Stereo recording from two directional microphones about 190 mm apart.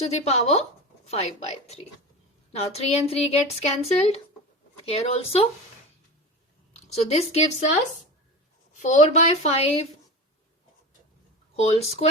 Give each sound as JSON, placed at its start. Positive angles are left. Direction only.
{"t": 0.0, "sound": "speech", "side_deg": 35}
{"t": 7.1, "sound": "speech", "side_deg": 35}
{"t": 8.8, "sound": "speech", "side_deg": 40}
{"t": 11.5, "sound": "speech", "side_deg": 35}